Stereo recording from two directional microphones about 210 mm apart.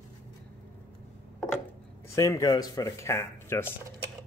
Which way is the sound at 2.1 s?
15° left (ahead or behind).